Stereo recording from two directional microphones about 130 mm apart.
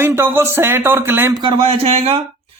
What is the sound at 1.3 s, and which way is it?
Speech, 40° right (ahead or behind).